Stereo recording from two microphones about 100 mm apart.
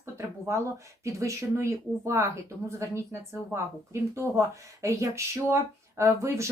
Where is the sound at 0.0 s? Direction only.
30° right (ahead or behind).